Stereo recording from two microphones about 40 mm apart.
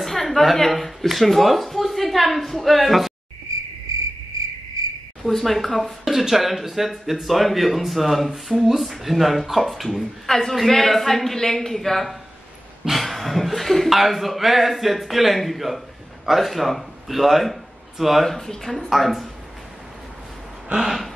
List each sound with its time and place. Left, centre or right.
0.0 s speech: centre
5.2 s a woman's voice: centre
18.9 s speech: centre
20.6 s a sound: centre